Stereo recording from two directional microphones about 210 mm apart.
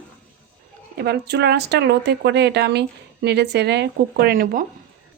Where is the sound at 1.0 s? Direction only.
50° right (ahead or behind).